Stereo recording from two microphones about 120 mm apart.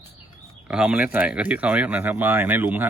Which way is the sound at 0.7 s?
10° right (ahead or behind).